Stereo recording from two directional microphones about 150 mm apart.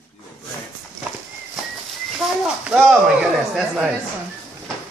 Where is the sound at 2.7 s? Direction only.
5° right (ahead or behind).